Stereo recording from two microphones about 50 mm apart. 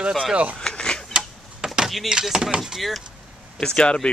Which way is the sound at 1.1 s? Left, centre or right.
Centre.